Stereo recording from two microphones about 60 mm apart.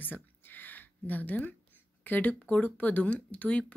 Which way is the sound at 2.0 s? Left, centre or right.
Left.